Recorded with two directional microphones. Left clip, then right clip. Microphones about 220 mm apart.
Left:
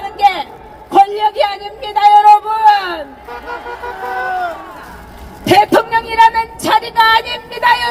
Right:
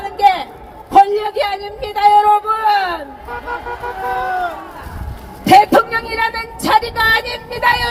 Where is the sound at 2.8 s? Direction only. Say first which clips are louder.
Right 1 dB; 30° left (ahead or behind).